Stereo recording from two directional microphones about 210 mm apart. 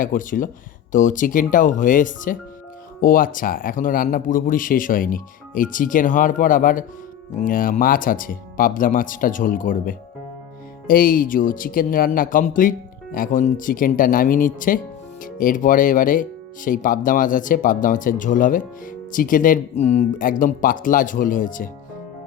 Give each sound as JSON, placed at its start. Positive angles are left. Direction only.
{"t": 0.0, "sound": "speech", "side_deg": 40}